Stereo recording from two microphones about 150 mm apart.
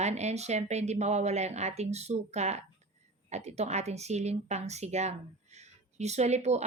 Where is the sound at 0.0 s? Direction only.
50° right (ahead or behind).